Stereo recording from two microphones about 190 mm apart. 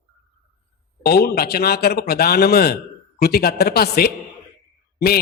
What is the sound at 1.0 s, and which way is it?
A man's voice, 55° left (ahead or behind).